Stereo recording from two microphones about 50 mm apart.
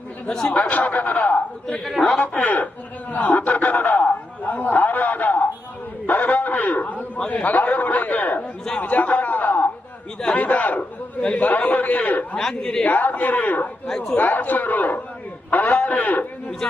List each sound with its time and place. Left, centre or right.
0.5 s a man's voice: left
1.8 s a woman's voice: centre
2.3 s a man's voice: left
8.8 s a sound: left
10.3 s a man's voice: left
12.4 s a woman's voice: centre
12.8 s a man's voice: left
13.8 s a woman's voice: centre
14.2 s a man's voice: left